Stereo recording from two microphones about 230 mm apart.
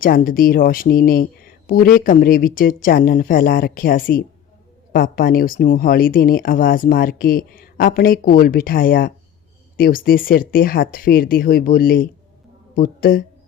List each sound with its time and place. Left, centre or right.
0.0 s speech: left